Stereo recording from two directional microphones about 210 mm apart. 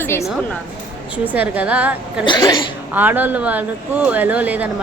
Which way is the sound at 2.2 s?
20° left (ahead or behind).